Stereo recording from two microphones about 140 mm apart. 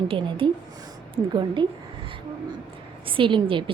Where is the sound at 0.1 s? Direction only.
40° right (ahead or behind).